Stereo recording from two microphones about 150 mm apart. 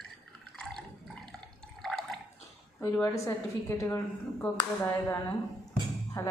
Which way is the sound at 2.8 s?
20° left (ahead or behind).